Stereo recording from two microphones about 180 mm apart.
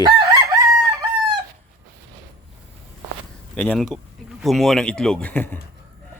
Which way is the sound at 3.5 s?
5° left (ahead or behind).